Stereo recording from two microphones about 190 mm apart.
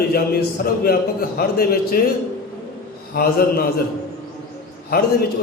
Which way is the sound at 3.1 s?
55° left (ahead or behind).